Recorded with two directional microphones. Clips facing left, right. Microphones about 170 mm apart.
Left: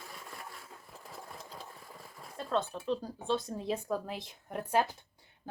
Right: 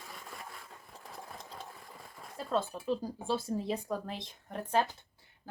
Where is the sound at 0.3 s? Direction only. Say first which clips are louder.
Even; centre (ahead or behind).